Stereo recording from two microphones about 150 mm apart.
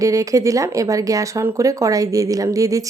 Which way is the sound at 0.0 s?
20° right (ahead or behind).